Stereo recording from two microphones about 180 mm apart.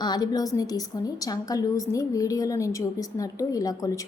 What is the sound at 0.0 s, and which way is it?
A woman's voice, 20° left (ahead or behind).